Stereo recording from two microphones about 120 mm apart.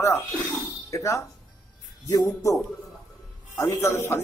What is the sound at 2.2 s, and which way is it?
Speech, 25° left (ahead or behind).